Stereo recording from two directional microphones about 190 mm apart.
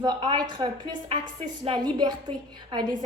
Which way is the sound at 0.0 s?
25° right (ahead or behind).